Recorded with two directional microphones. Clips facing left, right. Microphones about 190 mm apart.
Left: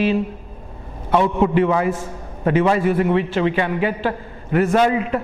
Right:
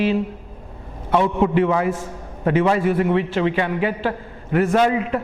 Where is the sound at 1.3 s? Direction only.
15° left (ahead or behind).